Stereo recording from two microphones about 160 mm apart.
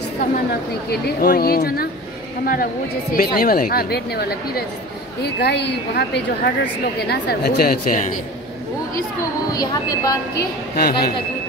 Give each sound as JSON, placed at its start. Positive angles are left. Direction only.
{"t": 0.8, "sound": "a woman's voice", "side_deg": 75}
{"t": 9.5, "sound": "speech", "side_deg": 25}
{"t": 10.3, "sound": "a woman's voice", "side_deg": 70}